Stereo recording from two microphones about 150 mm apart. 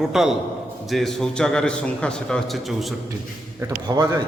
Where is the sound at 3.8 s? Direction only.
25° right (ahead or behind).